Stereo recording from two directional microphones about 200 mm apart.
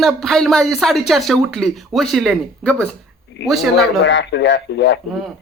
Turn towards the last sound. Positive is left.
turn(degrees=65)  # may be behind; listen again after turning